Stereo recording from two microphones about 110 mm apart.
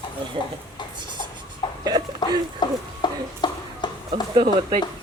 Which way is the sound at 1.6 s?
45° left (ahead or behind).